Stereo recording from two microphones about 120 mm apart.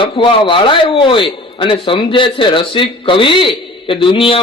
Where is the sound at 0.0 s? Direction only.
45° left (ahead or behind).